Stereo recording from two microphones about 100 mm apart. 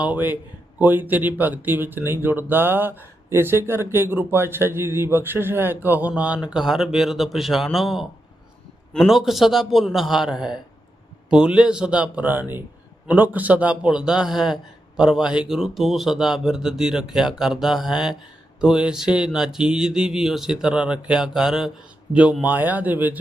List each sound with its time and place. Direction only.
0.0 s a man's voice: 15° right (ahead or behind)